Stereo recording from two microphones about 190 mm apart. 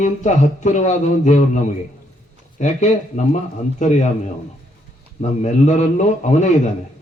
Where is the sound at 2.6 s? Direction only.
40° left (ahead or behind).